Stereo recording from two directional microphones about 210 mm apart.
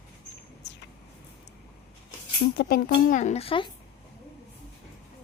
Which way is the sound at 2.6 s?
45° left (ahead or behind).